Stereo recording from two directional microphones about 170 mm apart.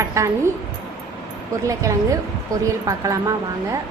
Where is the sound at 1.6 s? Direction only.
20° right (ahead or behind).